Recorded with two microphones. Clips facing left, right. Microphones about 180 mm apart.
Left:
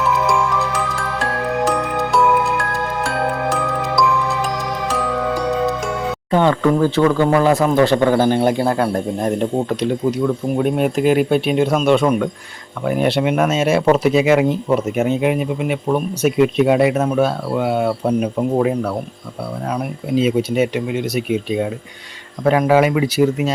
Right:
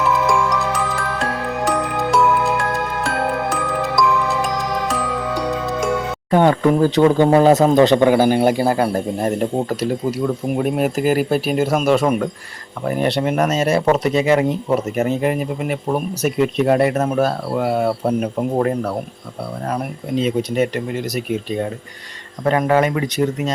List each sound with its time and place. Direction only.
0.3 s music: centre (ahead or behind)
6.5 s speech: 20° right (ahead or behind)
7.7 s speech: 20° right (ahead or behind); by 18.4 s 5° right (ahead or behind)
19.6 s speech: 5° right (ahead or behind)